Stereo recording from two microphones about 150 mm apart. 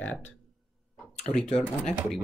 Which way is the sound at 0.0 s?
10° left (ahead or behind).